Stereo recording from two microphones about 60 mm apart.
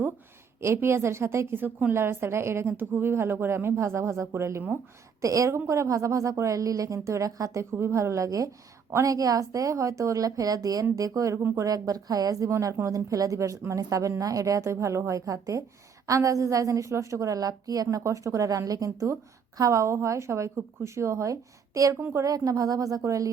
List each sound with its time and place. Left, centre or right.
0.6 s speech: right
5.2 s a woman's voice: right
7.3 s a woman's voice: right
8.9 s speech: right
9.1 s a woman's voice: right
10.9 s a woman's voice: right
11.5 s a woman's voice: right
18.0 s a woman's voice: right